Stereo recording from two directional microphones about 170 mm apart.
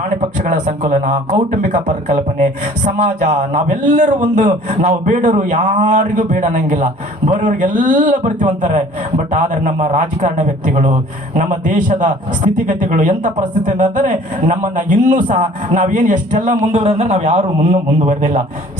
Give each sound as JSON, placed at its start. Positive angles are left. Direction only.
{"t": 0.4, "sound": "a man's voice", "side_deg": -45}